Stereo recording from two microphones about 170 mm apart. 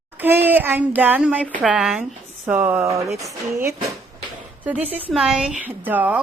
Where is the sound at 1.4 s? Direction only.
10° left (ahead or behind).